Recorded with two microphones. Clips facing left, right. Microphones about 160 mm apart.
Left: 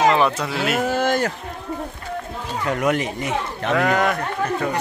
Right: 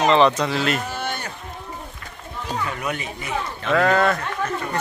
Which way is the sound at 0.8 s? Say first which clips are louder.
Left 9 dB; 90° left.